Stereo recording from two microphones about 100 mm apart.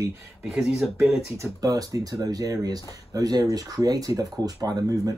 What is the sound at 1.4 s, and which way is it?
Speech, 40° right (ahead or behind).